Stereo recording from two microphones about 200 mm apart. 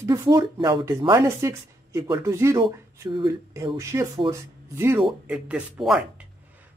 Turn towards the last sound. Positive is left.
turn(degrees=0)  # may be behind; listen again after turning